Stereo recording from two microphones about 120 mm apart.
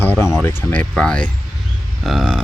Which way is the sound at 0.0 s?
15° left (ahead or behind).